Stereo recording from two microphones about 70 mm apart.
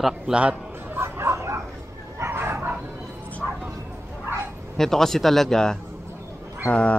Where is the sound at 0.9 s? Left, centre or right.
Right.